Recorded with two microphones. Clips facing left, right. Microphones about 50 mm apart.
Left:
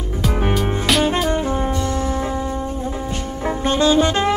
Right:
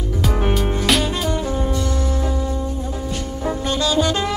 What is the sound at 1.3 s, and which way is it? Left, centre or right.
Music, left.